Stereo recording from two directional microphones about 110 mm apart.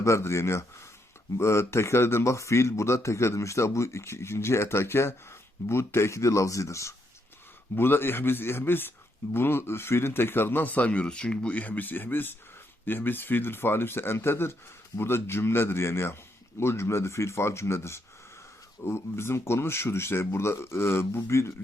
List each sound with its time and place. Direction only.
0.0 s speech: 25° left (ahead or behind)